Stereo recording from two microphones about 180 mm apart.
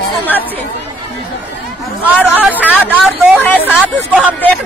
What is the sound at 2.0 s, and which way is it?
Speech, 10° right (ahead or behind).